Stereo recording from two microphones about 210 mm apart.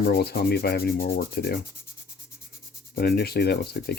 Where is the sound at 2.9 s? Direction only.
50° left (ahead or behind).